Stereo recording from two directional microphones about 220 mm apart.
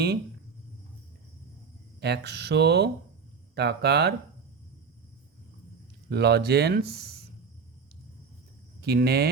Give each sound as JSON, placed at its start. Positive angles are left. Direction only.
{"t": 2.0, "sound": "speech", "side_deg": -50}
{"t": 6.1, "sound": "speech", "side_deg": -50}
{"t": 8.8, "sound": "speech", "side_deg": -45}